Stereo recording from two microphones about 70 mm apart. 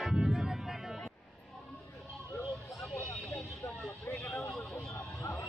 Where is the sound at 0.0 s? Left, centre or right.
Centre.